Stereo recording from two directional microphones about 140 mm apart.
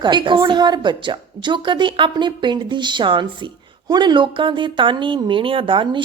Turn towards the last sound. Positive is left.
turn(degrees=-35)  # may be behind; listen again after turning